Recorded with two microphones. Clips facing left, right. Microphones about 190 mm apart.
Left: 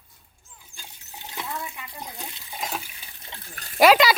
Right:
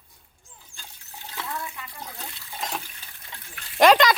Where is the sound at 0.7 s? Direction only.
15° left (ahead or behind).